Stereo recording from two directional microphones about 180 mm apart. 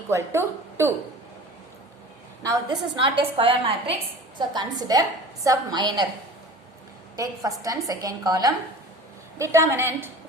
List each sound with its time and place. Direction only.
0.1 s a woman's voice: 15° right (ahead or behind)
2.4 s a woman's voice: 20° right (ahead or behind)
7.2 s a woman's voice: 20° right (ahead or behind)